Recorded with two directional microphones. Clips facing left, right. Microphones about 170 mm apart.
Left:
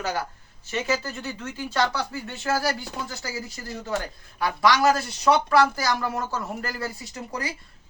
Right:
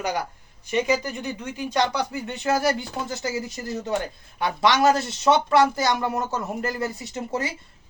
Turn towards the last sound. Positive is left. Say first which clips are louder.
# right 5 dB
turn(degrees=-25)  # may be behind; listen again after turning